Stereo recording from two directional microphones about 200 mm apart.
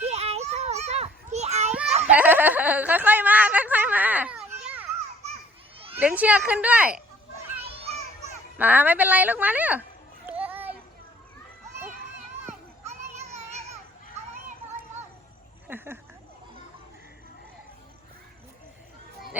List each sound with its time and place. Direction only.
0.0 s children playing: 30° right (ahead or behind)
2.0 s snicker: 10° right (ahead or behind)
6.0 s a woman's voice: 5° right (ahead or behind)
8.5 s a woman's voice: 10° right (ahead or behind)
10.2 s children playing: 10° right (ahead or behind)
12.5 s children playing: 35° right (ahead or behind)
15.6 s a sound: 10° right (ahead or behind)